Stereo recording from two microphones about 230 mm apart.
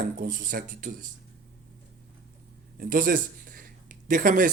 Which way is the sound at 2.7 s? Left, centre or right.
Right.